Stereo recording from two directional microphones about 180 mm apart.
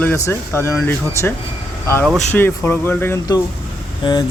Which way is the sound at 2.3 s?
10° left (ahead or behind).